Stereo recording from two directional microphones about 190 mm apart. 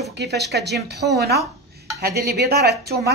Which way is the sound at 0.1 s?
60° right (ahead or behind).